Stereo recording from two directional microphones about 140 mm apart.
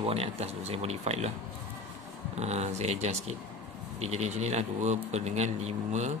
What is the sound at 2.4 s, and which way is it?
Speech, 50° right (ahead or behind).